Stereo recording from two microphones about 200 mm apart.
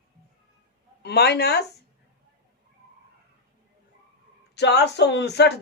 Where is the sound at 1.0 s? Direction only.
55° left (ahead or behind).